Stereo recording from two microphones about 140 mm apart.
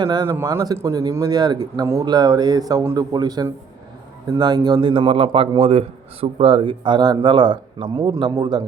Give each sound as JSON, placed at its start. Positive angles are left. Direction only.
{"t": 0.0, "sound": "a man's voice", "side_deg": -30}
{"t": 0.3, "sound": "a man's voice", "side_deg": -20}